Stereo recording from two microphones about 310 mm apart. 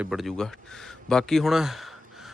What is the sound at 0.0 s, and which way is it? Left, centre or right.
A man's voice, centre.